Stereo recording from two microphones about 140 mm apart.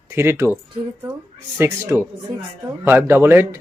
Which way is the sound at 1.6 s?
15° right (ahead or behind).